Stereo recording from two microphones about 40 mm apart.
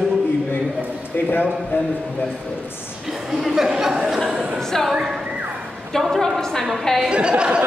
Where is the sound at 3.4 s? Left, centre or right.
Centre.